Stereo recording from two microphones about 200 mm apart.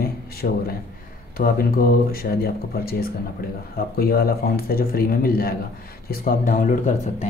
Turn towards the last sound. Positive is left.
turn(degrees=40)  # may be behind; listen again after turning